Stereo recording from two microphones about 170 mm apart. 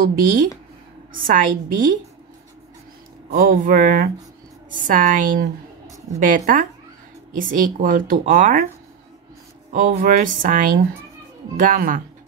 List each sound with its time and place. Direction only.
0.0 s a woman's voice: 55° right (ahead or behind)
3.3 s speech: 50° right (ahead or behind)
9.7 s speech: 50° right (ahead or behind)